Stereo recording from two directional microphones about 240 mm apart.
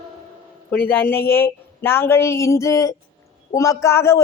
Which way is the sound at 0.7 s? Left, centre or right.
Centre.